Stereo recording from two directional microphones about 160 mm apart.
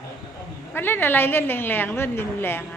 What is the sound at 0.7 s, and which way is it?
A woman's voice, 15° left (ahead or behind).